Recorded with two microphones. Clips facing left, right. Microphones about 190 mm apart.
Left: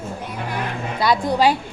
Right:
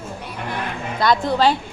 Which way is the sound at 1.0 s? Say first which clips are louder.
Even; 10° left (ahead or behind).